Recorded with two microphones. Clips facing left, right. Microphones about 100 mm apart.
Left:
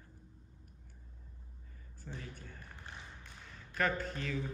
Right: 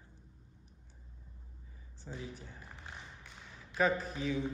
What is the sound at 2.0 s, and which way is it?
Speech, 15° right (ahead or behind).